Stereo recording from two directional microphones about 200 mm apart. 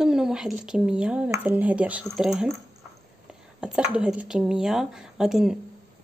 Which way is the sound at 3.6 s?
5° right (ahead or behind).